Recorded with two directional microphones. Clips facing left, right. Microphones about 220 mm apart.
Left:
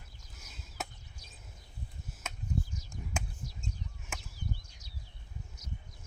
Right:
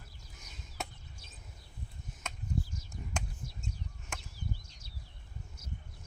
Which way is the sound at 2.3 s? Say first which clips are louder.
Left 1 dB; 5° left (ahead or behind).